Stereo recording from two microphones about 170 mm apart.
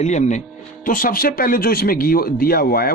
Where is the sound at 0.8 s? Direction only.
55° left (ahead or behind).